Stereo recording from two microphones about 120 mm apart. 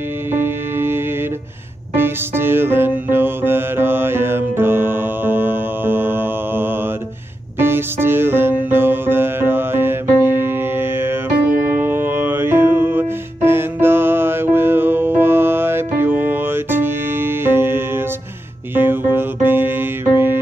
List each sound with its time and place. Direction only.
0.3 s music: 20° right (ahead or behind)
2.0 s music: 20° right (ahead or behind)